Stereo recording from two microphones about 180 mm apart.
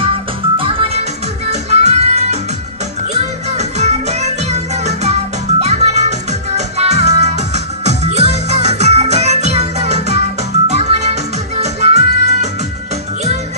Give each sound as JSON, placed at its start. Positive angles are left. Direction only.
{"t": 0.6, "sound": "music", "side_deg": -30}